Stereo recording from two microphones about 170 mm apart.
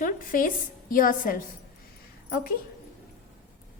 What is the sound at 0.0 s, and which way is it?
A woman's voice, 55° left (ahead or behind).